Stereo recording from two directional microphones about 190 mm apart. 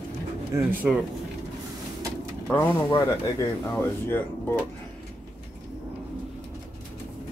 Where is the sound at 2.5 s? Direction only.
10° left (ahead or behind).